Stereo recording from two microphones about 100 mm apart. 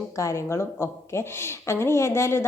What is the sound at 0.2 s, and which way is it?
A woman's voice, 30° left (ahead or behind).